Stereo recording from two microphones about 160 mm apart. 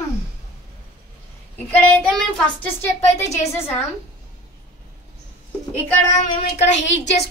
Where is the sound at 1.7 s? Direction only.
10° left (ahead or behind).